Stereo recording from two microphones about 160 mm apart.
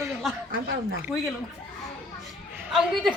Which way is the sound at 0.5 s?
70° right (ahead or behind).